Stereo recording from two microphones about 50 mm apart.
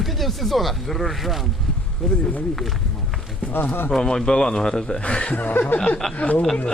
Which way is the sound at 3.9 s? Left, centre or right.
Centre.